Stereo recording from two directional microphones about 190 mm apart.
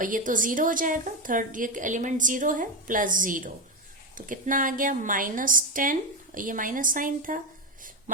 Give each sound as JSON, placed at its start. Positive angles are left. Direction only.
{"t": 0.0, "sound": "a woman's voice", "side_deg": -45}